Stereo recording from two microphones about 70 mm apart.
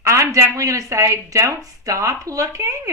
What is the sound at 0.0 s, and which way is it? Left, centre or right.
Speech, right.